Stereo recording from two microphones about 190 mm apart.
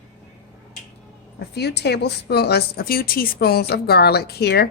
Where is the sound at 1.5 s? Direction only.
60° left (ahead or behind).